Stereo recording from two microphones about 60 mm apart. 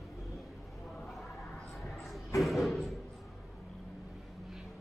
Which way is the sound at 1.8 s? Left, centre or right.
Centre.